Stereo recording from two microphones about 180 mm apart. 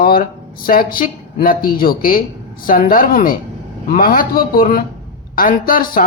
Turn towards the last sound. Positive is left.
turn(degrees=50)  # may be behind; listen again after turning